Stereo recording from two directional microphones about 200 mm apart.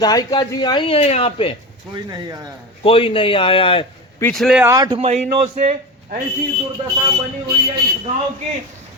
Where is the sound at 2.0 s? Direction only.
20° right (ahead or behind).